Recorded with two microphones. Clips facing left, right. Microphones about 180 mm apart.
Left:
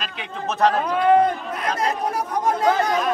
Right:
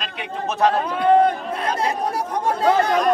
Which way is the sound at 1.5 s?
30° right (ahead or behind).